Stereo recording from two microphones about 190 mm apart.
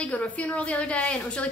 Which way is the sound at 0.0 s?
5° left (ahead or behind).